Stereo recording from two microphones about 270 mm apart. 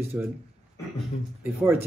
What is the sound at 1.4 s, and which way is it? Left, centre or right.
Speech, centre.